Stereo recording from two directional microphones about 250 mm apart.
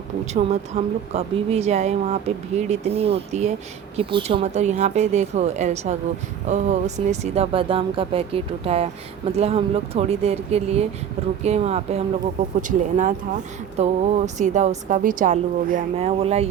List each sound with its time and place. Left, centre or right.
0.7 s a woman's voice: right